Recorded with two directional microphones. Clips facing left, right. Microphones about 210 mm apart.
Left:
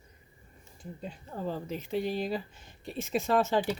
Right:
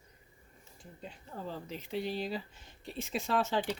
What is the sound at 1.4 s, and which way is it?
Speech, 45° left (ahead or behind).